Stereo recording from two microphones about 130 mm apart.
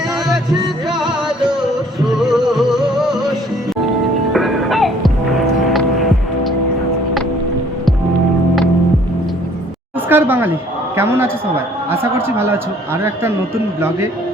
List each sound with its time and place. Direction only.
0.9 s music: 5° right (ahead or behind)
4.3 s music: centre (ahead or behind)
10.1 s a sound: 15° right (ahead or behind)
10.9 s a man's voice: 20° right (ahead or behind)
12.4 s a man's voice: 20° right (ahead or behind)